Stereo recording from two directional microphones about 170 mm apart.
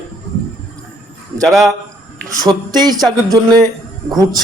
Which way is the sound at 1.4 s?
Centre (ahead or behind).